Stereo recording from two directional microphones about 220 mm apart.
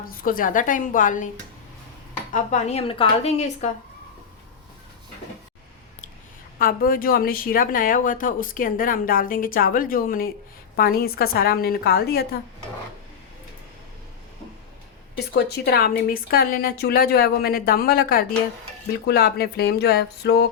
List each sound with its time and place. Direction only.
0.0 s speech: 40° left (ahead or behind)
2.3 s a woman's voice: 30° left (ahead or behind)
6.6 s a woman's voice: 40° left (ahead or behind)
15.1 s a woman's voice: 45° left (ahead or behind)